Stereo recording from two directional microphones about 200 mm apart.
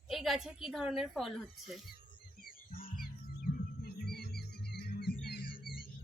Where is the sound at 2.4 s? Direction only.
45° left (ahead or behind).